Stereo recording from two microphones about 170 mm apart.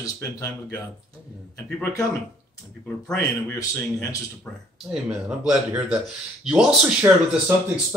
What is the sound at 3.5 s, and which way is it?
Speech, 20° left (ahead or behind).